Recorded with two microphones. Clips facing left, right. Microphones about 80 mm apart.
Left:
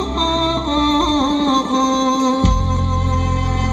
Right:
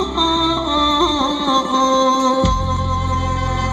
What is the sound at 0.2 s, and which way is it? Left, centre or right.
Music, right.